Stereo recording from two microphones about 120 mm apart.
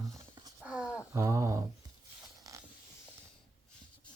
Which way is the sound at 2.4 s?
30° right (ahead or behind).